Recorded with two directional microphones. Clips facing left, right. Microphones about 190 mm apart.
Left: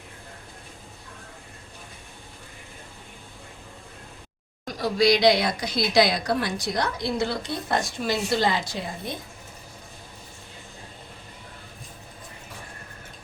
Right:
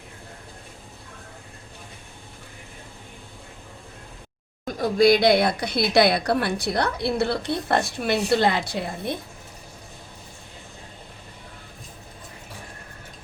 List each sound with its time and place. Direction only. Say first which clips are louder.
4.6 s speech: right 4 dB; 50° right (ahead or behind)